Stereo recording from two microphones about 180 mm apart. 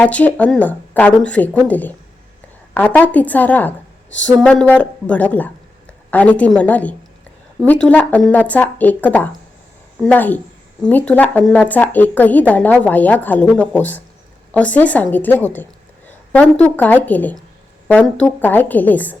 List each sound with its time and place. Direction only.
0.0 s a woman's voice: 10° left (ahead or behind)
16.0 s a sound: 10° left (ahead or behind)
16.6 s speech: 10° left (ahead or behind)